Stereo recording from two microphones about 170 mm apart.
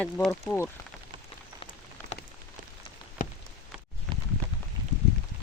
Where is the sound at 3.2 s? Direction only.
50° left (ahead or behind).